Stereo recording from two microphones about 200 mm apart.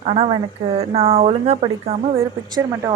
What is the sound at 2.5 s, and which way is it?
Speech, 20° right (ahead or behind).